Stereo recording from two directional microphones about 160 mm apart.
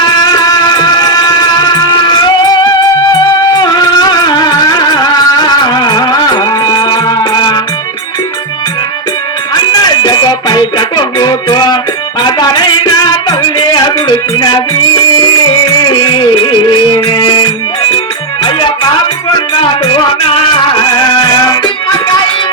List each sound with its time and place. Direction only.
0.2 s music: 25° left (ahead or behind)
9.8 s music: 25° left (ahead or behind)
15.8 s music: 30° left (ahead or behind)
18.4 s music: 30° left (ahead or behind)